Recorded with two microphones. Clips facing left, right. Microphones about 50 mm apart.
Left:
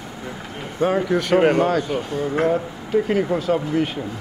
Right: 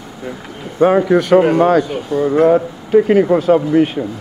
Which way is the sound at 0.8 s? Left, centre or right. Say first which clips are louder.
Right 8 dB; right.